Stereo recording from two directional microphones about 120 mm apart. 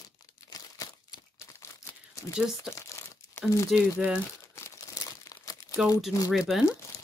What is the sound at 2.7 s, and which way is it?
Crumpling, 25° left (ahead or behind).